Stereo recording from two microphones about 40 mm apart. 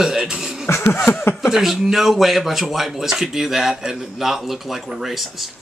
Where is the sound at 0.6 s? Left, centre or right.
Left.